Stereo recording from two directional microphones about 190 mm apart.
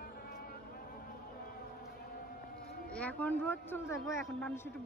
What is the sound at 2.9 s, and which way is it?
Speech, 10° left (ahead or behind).